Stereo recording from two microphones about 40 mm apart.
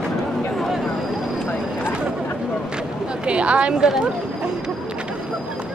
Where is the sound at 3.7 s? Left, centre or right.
Centre.